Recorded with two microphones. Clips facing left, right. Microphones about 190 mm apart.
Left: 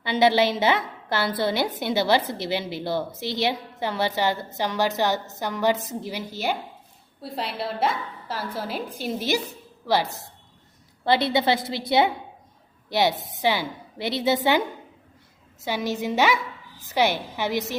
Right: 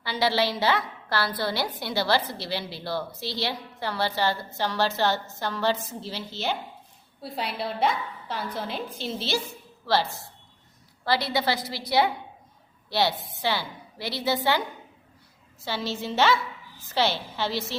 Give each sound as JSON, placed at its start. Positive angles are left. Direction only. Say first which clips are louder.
{"t": 0.0, "sound": "a woman's voice", "louder": "left 5 dB", "side_deg": 20}
{"t": 7.2, "sound": "a woman's voice", "louder": "left 1 dB", "side_deg": 0}
{"t": 15.6, "sound": "a woman's voice", "louder": "left 4 dB", "side_deg": 15}